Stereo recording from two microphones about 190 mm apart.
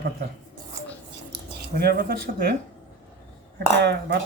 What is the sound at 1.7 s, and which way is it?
Speech, 55° right (ahead or behind).